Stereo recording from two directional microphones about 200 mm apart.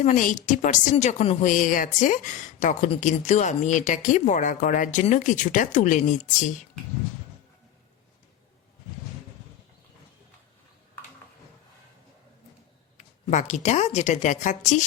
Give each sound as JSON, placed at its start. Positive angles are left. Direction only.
{"t": 0.0, "sound": "a woman's voice", "side_deg": 40}
{"t": 13.0, "sound": "a woman's voice", "side_deg": 35}